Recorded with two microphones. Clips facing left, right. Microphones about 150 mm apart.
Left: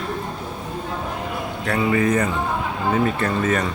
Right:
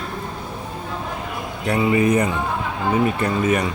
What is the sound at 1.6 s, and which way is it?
Speech, 15° right (ahead or behind).